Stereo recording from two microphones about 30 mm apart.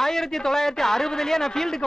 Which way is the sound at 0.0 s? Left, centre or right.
Centre.